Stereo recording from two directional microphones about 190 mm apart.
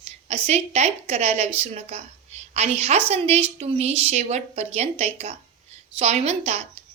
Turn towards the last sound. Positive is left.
turn(degrees=-35)  # may be behind; listen again after turning